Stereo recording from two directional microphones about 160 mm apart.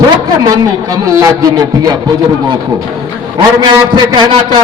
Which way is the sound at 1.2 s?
20° right (ahead or behind).